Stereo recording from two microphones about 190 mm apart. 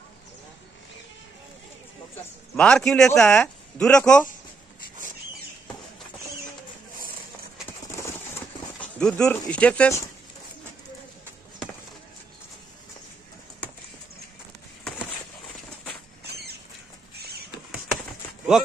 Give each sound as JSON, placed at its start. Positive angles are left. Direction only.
{"t": 2.5, "sound": "speech", "side_deg": 5}
{"t": 8.8, "sound": "speech", "side_deg": 5}
{"t": 16.3, "sound": "rodents", "side_deg": -55}